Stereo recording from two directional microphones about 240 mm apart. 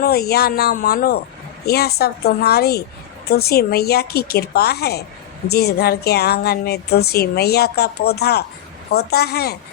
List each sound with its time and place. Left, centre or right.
0.0 s speech: left